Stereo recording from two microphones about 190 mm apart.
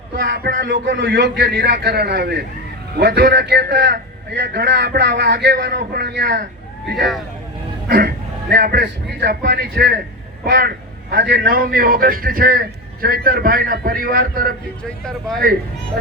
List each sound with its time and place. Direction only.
0.2 s a man's voice: 50° right (ahead or behind)
0.7 s a man's voice: 70° right (ahead or behind)
6.9 s speech: centre (ahead or behind)
7.9 s a man's voice: 55° right (ahead or behind)